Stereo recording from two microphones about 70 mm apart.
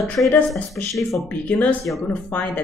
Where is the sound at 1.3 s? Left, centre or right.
Left.